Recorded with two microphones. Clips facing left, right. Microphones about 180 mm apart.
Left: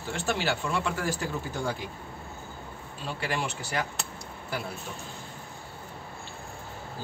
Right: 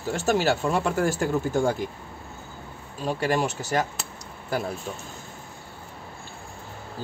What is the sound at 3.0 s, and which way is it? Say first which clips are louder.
Speech: right 8 dB; 45° right (ahead or behind).